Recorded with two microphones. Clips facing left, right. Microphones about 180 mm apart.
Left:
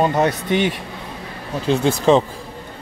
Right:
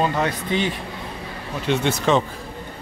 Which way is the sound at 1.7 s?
35° left (ahead or behind).